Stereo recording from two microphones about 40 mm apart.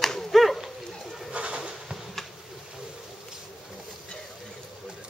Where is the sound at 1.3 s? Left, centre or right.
Right.